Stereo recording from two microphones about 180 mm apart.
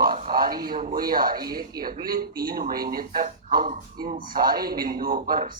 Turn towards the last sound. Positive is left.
turn(degrees=-55)  # may be behind; listen again after turning